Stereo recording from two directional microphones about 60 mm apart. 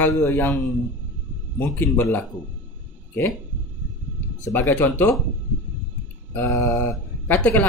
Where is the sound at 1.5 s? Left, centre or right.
Left.